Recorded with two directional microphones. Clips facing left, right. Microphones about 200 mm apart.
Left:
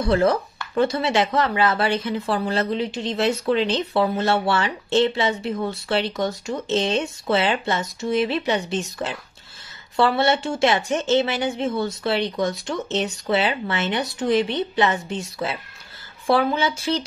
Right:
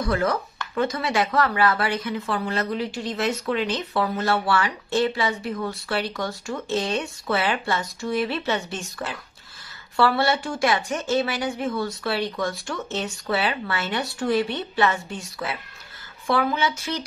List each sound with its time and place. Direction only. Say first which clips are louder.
0.0 s speech: left 5 dB; 30° left (ahead or behind)